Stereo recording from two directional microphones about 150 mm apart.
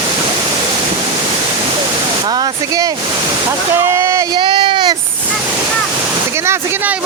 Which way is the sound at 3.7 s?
20° right (ahead or behind).